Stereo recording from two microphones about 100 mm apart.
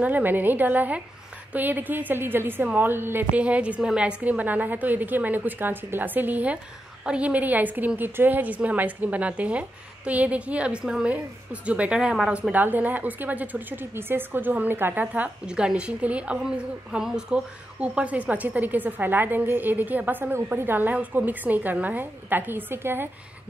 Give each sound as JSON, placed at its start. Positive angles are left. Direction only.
{"t": 0.0, "sound": "speech", "side_deg": -20}